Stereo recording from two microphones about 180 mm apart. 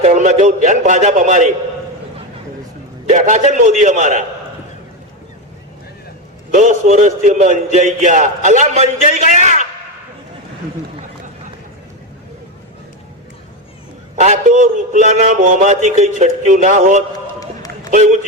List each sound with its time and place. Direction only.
0.0 s a man's voice: 40° right (ahead or behind)
3.1 s a man's voice: 40° right (ahead or behind)
6.5 s a man's voice: 45° right (ahead or behind)
14.2 s a man's voice: 45° right (ahead or behind)